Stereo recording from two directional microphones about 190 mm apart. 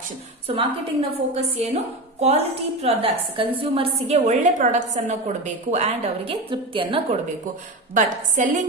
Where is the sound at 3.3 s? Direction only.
25° right (ahead or behind).